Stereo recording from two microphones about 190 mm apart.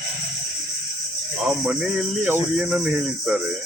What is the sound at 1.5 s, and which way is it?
Speech, 5° right (ahead or behind).